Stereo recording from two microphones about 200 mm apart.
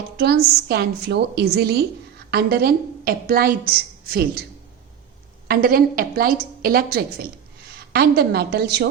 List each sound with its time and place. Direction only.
0.2 s a woman's voice: 55° right (ahead or behind)
5.5 s a woman's voice: 45° right (ahead or behind)